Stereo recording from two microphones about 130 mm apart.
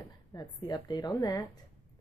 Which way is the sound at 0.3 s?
35° left (ahead or behind).